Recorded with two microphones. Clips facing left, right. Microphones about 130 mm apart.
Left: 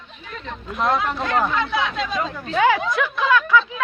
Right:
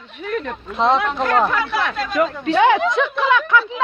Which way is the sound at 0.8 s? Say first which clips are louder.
Right 4 dB; 25° right (ahead or behind).